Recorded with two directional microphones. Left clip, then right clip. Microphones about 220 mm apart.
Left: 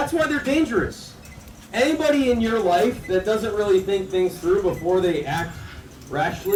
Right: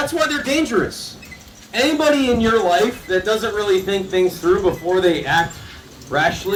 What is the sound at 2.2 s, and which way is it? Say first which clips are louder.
A man's voice: right 4 dB; 30° right (ahead or behind).